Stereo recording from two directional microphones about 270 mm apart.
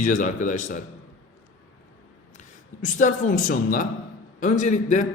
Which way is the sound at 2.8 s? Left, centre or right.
Left.